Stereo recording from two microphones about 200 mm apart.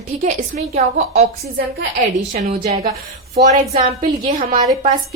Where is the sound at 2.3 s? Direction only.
30° right (ahead or behind).